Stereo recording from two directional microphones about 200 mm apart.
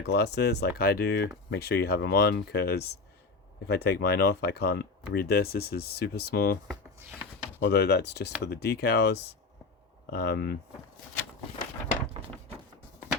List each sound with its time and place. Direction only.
0.0 s speech: 55° left (ahead or behind)
7.6 s speech: 55° left (ahead or behind)